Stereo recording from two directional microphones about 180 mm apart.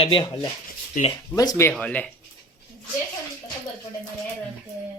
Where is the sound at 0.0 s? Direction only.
30° left (ahead or behind).